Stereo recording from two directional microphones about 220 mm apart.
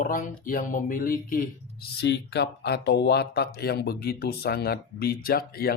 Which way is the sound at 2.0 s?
50° left (ahead or behind).